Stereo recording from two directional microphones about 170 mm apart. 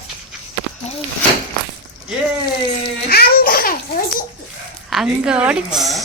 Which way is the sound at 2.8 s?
65° left (ahead or behind).